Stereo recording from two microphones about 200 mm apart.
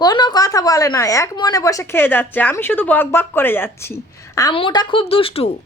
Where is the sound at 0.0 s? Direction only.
20° left (ahead or behind).